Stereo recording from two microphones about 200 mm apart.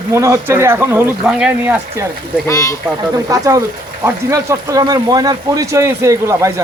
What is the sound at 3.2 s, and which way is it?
Speech, 15° right (ahead or behind).